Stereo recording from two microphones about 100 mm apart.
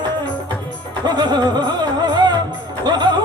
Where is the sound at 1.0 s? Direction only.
45° right (ahead or behind).